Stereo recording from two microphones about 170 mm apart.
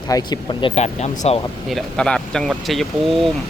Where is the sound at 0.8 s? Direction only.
40° left (ahead or behind).